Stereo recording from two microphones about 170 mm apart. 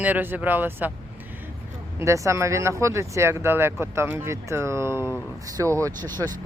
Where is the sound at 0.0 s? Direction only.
10° right (ahead or behind).